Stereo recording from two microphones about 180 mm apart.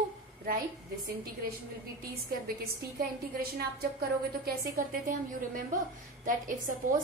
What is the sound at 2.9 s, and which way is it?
A woman's voice, 55° right (ahead or behind).